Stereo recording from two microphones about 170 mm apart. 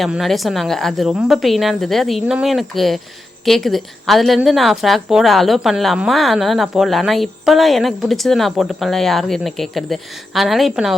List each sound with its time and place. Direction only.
0.0 s a woman's voice: centre (ahead or behind)